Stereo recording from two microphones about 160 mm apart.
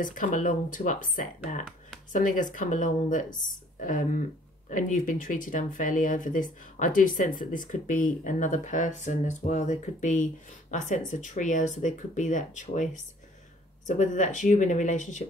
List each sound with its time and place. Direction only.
0.0 s speech: 55° left (ahead or behind)